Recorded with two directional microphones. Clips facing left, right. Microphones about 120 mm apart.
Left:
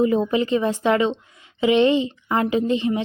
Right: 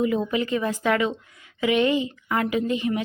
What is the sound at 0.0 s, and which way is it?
Speech, 30° left (ahead or behind).